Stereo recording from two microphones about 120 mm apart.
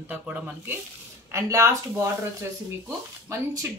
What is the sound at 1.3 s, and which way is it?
Speech, 25° right (ahead or behind).